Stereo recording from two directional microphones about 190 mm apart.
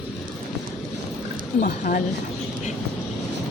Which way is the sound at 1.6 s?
45° left (ahead or behind).